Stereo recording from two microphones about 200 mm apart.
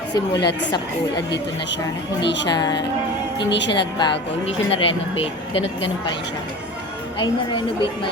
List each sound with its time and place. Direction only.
0.3 s speech: 20° left (ahead or behind)
2.2 s a woman's voice: 60° left (ahead or behind)
2.5 s speech: 20° left (ahead or behind)
7.2 s speech: 25° left (ahead or behind)